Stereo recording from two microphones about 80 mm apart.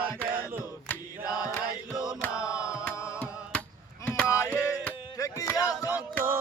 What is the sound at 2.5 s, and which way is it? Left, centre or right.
Chant, left.